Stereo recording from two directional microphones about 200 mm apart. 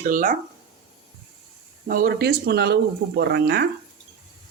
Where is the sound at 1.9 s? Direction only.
50° right (ahead or behind).